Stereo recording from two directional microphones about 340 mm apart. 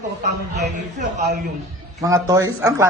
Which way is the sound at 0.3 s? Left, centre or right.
Right.